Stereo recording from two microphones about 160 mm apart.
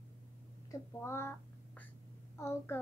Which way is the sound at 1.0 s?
15° left (ahead or behind).